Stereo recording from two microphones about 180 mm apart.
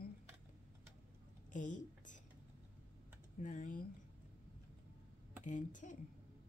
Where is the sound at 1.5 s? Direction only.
45° left (ahead or behind).